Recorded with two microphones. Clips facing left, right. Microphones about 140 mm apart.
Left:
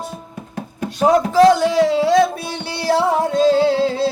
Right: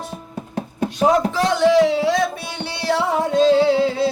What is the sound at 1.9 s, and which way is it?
Music, 40° left (ahead or behind).